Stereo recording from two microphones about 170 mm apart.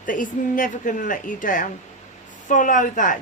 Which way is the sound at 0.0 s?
50° left (ahead or behind).